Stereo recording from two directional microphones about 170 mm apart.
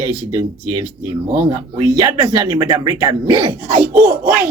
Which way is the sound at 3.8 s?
10° right (ahead or behind).